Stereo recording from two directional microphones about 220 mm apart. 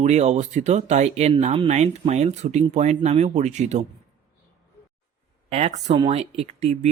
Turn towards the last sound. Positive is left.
turn(degrees=-30)  # may be behind; listen again after turning